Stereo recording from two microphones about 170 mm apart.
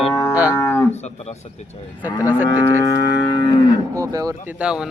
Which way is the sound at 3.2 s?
25° left (ahead or behind).